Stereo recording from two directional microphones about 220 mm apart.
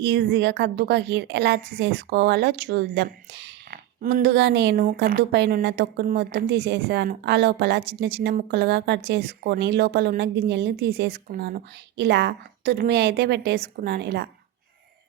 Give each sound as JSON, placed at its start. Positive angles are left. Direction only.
{"t": 0.0, "sound": "a woman's voice", "side_deg": -50}